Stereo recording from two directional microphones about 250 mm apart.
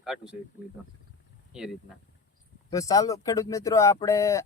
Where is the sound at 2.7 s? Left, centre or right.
Centre.